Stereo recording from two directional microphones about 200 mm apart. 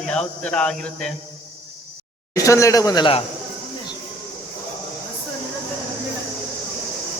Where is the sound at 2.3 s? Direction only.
15° left (ahead or behind).